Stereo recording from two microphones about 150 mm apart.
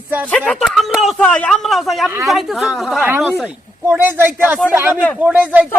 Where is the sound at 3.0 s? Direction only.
10° right (ahead or behind).